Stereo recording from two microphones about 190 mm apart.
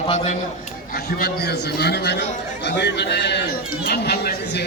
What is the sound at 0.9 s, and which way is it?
A man's voice, 55° left (ahead or behind).